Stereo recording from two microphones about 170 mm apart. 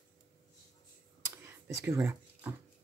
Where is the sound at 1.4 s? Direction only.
15° right (ahead or behind).